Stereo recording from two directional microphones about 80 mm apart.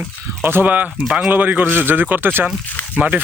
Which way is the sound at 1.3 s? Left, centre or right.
Right.